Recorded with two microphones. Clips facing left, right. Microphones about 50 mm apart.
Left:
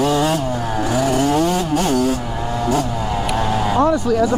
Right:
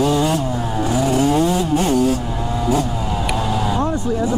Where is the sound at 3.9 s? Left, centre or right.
Left.